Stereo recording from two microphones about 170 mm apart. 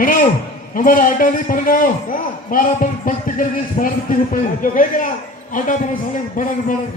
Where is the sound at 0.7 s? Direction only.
55° left (ahead or behind).